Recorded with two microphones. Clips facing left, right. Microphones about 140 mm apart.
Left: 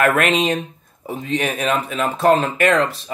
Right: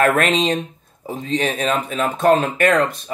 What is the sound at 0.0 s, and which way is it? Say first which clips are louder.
Speech: even; 35° right (ahead or behind).